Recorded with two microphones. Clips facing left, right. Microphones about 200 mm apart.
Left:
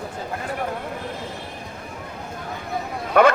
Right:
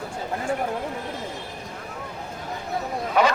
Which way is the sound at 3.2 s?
55° left (ahead or behind).